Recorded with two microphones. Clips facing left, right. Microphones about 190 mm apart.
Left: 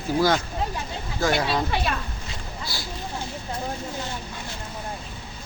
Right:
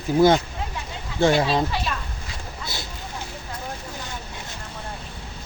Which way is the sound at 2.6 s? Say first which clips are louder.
Right 1 dB; 20° right (ahead or behind).